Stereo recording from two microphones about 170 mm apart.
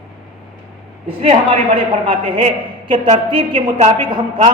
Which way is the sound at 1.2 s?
30° right (ahead or behind).